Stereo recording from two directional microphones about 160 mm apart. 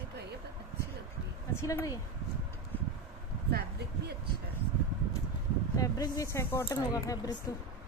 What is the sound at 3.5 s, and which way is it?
Speech, 85° right.